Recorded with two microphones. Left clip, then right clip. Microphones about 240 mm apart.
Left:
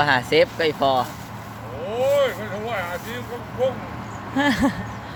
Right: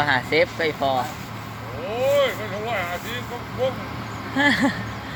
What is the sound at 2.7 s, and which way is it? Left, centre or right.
Vehicle, left.